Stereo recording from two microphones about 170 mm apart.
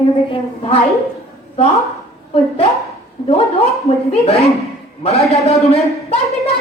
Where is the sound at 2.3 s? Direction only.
35° left (ahead or behind).